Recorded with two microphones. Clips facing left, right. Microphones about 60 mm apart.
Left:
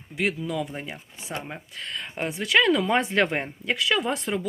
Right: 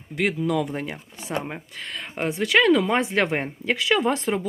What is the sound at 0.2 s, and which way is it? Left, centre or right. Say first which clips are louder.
Speech: right 4 dB; right.